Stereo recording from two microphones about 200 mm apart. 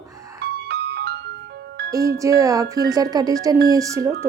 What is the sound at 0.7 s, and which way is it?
Music, 55° right (ahead or behind).